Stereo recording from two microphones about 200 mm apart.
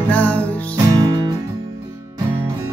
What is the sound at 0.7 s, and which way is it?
Music, 20° right (ahead or behind).